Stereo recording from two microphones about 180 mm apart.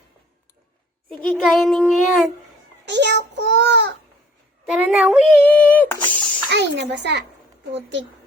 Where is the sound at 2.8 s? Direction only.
75° right (ahead or behind).